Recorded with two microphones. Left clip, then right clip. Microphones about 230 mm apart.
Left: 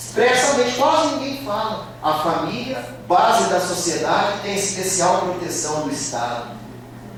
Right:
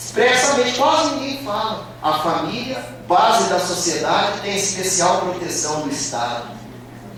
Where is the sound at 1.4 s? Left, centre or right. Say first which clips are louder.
Right 1 dB; centre.